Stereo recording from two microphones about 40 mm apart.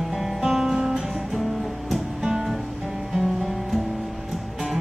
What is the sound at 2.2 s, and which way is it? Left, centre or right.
Music, centre.